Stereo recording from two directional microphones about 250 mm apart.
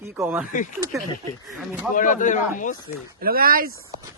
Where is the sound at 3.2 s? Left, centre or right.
Right.